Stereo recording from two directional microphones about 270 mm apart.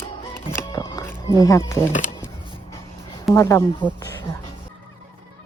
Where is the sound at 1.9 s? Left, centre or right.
Left.